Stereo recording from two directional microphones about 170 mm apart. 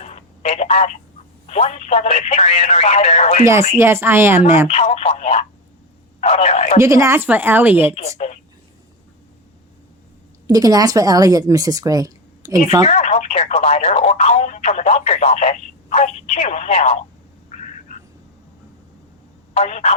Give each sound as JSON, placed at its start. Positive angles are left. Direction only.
{"t": 0.0, "sound": "telephone", "side_deg": 40}
{"t": 1.5, "sound": "speech", "side_deg": 40}
{"t": 3.8, "sound": "a woman's voice", "side_deg": -15}
{"t": 4.7, "sound": "speech", "side_deg": 40}
{"t": 6.7, "sound": "a woman's voice", "side_deg": -15}
{"t": 10.4, "sound": "a woman's voice", "side_deg": -20}
{"t": 12.8, "sound": "speech", "side_deg": 40}
{"t": 17.5, "sound": "a sound", "side_deg": 45}
{"t": 19.5, "sound": "speech", "side_deg": 40}